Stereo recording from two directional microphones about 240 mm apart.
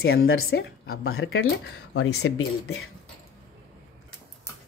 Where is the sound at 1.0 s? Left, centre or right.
Left.